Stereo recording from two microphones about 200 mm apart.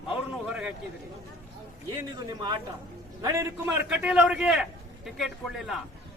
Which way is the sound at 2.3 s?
20° right (ahead or behind).